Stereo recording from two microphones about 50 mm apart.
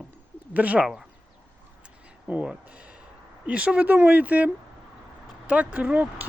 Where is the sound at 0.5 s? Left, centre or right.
Right.